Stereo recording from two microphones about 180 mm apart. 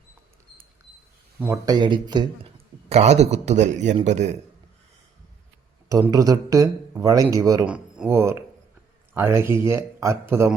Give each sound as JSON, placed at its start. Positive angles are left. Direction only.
{"t": 1.6, "sound": "speech", "side_deg": -25}
{"t": 2.9, "sound": "a man's voice", "side_deg": -40}
{"t": 5.9, "sound": "speech", "side_deg": -20}
{"t": 7.6, "sound": "a man's voice", "side_deg": -5}